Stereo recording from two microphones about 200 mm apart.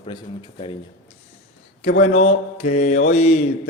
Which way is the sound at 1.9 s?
30° left (ahead or behind).